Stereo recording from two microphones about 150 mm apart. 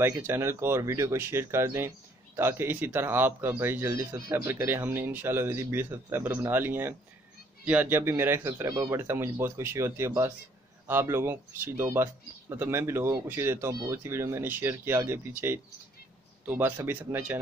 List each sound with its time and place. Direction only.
0.0 s speech: 15° right (ahead or behind)